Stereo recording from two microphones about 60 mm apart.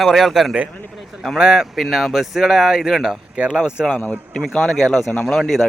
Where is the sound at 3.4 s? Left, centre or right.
Centre.